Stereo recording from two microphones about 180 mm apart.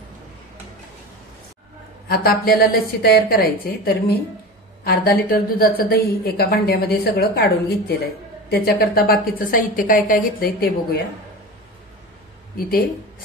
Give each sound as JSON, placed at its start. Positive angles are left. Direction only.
{"t": 2.0, "sound": "a woman's voice", "side_deg": 55}
{"t": 12.5, "sound": "a woman's voice", "side_deg": 55}